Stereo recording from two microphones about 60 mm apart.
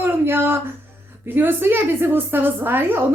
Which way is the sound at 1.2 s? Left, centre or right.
Right.